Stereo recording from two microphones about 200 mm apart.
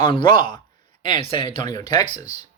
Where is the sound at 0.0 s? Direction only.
25° left (ahead or behind).